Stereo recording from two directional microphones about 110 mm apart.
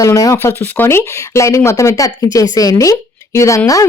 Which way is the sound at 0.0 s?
35° left (ahead or behind).